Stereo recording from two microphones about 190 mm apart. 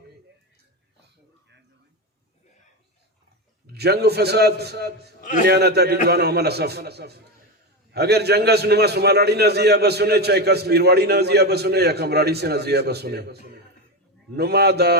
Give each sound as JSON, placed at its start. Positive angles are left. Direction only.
{"t": 3.7, "sound": "a man's voice", "side_deg": -55}
{"t": 5.2, "sound": "a man's voice", "side_deg": 45}
{"t": 5.5, "sound": "a man's voice", "side_deg": -60}